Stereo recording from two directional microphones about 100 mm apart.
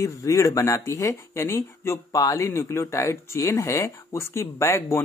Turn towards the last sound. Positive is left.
turn(degrees=30)  # may be behind; listen again after turning